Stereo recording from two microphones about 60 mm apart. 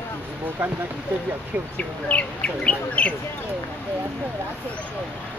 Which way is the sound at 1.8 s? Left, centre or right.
Left.